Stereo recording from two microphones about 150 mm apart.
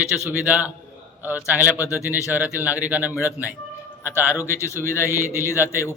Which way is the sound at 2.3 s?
10° right (ahead or behind).